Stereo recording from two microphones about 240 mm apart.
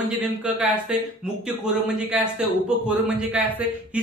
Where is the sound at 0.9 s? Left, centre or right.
Centre.